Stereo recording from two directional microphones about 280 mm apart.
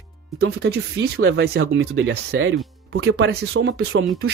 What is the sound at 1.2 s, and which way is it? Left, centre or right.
Speech, right.